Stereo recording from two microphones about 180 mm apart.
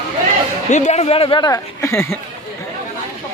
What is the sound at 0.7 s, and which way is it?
Speech, 40° left (ahead or behind).